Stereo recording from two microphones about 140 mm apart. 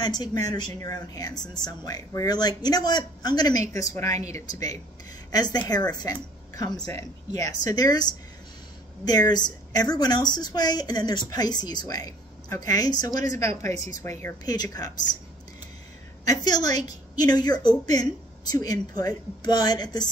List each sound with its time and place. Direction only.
0.0 s speech: 30° left (ahead or behind)
16.3 s speech: 30° left (ahead or behind)